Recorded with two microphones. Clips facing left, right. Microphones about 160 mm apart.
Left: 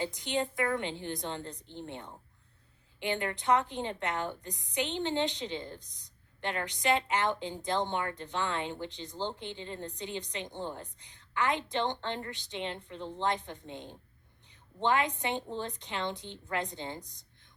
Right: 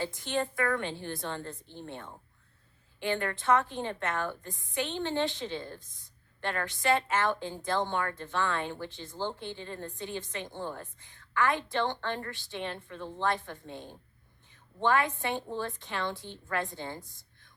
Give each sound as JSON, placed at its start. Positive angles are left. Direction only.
{"t": 0.0, "sound": "a woman's voice", "side_deg": 20}